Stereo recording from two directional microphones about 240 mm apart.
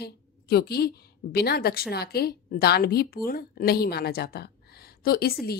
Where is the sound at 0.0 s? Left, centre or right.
Left.